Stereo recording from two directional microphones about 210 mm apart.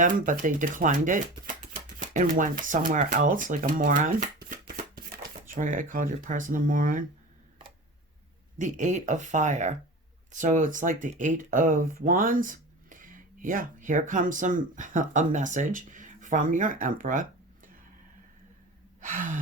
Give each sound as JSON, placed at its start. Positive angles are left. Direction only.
{"t": 0.0, "sound": "speech", "side_deg": -40}
{"t": 8.5, "sound": "speech", "side_deg": -35}
{"t": 19.0, "sound": "speech", "side_deg": -40}